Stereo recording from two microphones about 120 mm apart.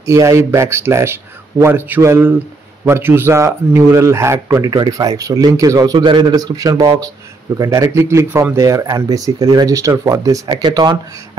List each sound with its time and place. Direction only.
0.0 s speech: 25° right (ahead or behind)
4.5 s a man's voice: 30° right (ahead or behind)